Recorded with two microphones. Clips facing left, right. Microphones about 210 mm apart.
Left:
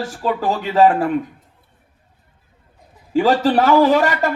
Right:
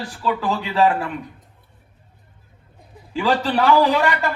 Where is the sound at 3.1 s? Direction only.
45° left (ahead or behind).